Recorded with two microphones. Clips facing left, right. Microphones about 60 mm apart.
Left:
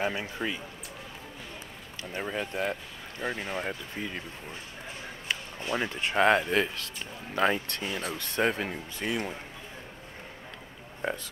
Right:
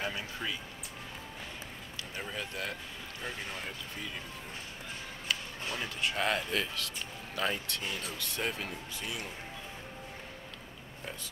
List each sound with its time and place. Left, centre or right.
0.0 s speech: left
2.1 s speech: left
5.3 s speech: left